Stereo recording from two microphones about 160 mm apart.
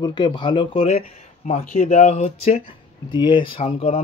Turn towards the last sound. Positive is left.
turn(degrees=40)  # may be behind; listen again after turning